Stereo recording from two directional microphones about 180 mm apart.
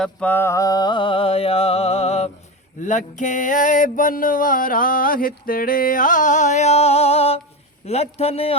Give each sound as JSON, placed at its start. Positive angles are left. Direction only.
{"t": 0.0, "sound": "music", "side_deg": 10}
{"t": 2.8, "sound": "a sound", "side_deg": 45}
{"t": 7.9, "sound": "music", "side_deg": 35}